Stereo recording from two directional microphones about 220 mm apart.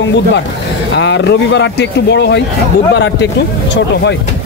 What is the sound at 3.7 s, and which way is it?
Speech, 55° left (ahead or behind).